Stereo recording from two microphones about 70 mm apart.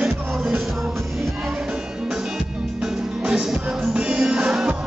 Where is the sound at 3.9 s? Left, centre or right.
Centre.